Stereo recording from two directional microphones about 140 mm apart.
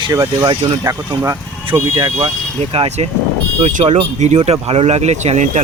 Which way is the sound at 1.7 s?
30° right (ahead or behind).